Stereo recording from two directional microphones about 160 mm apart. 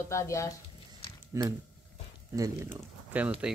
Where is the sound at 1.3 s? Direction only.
20° right (ahead or behind).